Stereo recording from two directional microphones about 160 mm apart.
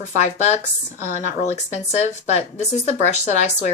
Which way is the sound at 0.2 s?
45° left (ahead or behind).